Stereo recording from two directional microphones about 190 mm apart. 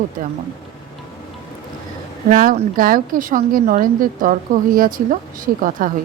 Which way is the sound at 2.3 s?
45° right (ahead or behind).